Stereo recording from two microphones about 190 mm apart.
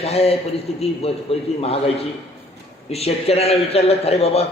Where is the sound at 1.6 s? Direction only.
30° left (ahead or behind).